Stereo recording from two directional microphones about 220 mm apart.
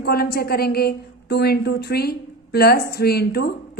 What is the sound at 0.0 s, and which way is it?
A woman's voice, 45° left (ahead or behind).